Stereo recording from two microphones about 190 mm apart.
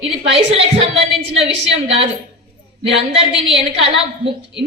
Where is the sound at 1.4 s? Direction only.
70° right (ahead or behind).